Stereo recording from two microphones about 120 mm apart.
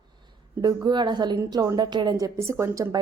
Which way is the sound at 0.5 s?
25° right (ahead or behind).